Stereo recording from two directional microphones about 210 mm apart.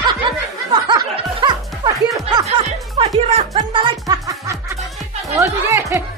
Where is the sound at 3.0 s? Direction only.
25° right (ahead or behind).